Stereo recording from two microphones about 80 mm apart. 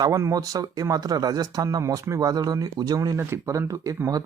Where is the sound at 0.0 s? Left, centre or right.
Right.